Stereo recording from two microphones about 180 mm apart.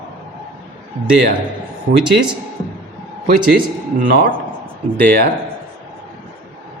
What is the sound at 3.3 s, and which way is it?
Speech, 55° right (ahead or behind).